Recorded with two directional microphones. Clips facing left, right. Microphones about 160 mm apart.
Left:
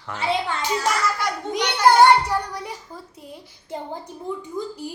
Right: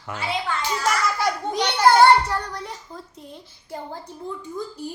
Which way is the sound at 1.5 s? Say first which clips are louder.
Left 1 dB; 15° left (ahead or behind).